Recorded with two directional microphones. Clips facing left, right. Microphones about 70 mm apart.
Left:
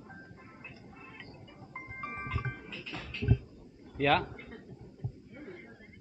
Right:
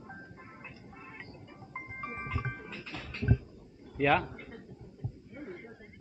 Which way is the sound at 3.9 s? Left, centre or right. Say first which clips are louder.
Right 1 dB; centre.